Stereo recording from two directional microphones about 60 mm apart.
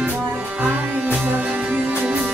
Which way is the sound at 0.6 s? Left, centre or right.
Right.